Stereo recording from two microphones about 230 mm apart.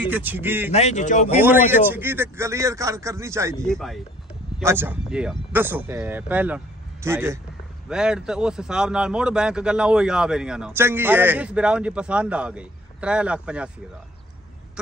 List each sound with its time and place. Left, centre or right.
0.0 s speech: centre
0.7 s speech: left
1.3 s speech: centre
3.6 s a man's voice: centre
4.6 s a man's voice: centre